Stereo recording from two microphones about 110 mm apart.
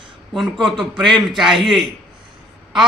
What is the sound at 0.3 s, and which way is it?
A man's voice, centre (ahead or behind).